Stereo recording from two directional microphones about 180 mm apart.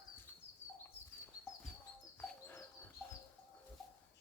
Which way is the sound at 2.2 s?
10° left (ahead or behind).